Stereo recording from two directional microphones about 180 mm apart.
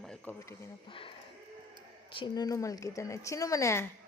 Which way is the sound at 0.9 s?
30° left (ahead or behind).